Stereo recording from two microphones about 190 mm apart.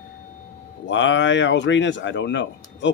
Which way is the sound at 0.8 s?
75° left (ahead or behind).